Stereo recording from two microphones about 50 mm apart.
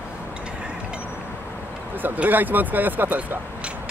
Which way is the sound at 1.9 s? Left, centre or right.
Right.